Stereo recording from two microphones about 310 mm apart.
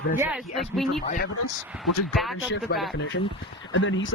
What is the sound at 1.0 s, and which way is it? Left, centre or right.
Speech, left.